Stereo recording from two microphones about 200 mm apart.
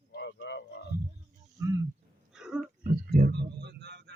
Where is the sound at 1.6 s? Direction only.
15° right (ahead or behind).